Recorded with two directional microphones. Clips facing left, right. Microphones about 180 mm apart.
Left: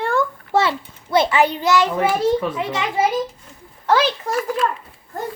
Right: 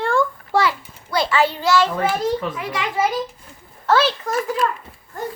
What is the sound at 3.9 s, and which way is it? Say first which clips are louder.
Speech: even; 15° left (ahead or behind).